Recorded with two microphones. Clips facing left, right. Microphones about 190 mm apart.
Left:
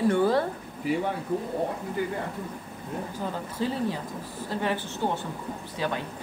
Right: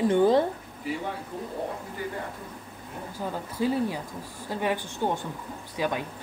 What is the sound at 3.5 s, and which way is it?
A woman's voice, 10° right (ahead or behind).